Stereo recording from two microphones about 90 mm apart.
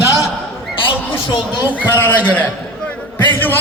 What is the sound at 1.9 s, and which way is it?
Speech, 25° left (ahead or behind).